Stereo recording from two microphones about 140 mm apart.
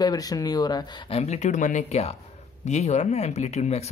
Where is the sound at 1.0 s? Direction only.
50° left (ahead or behind).